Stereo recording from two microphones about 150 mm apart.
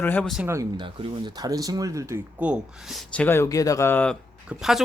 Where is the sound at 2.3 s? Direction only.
5° right (ahead or behind).